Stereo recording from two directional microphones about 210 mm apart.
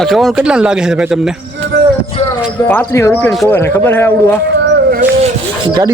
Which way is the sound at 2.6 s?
10° left (ahead or behind).